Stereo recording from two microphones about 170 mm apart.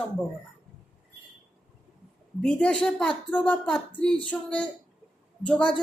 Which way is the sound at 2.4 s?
5° left (ahead or behind).